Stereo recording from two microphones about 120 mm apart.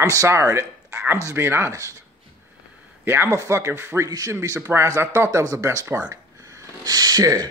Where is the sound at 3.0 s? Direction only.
20° right (ahead or behind).